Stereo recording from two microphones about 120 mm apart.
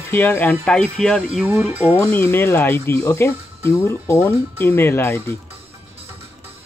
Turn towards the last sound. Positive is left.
turn(degrees=20)  # may be behind; listen again after turning